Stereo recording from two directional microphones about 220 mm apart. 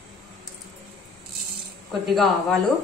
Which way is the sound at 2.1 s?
Centre (ahead or behind).